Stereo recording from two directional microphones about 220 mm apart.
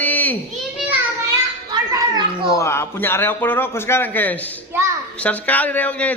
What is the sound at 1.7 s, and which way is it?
Children playing, 20° right (ahead or behind).